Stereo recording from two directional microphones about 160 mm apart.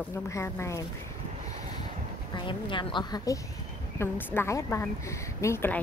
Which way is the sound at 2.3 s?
30° left (ahead or behind).